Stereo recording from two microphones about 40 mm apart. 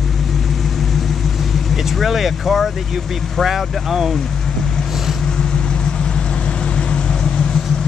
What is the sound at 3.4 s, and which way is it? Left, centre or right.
Speech, centre.